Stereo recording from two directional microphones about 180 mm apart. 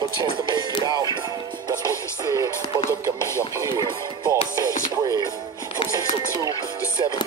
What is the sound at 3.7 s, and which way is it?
Speech, 20° right (ahead or behind).